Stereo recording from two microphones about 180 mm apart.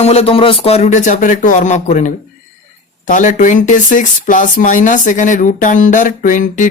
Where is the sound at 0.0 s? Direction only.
35° left (ahead or behind).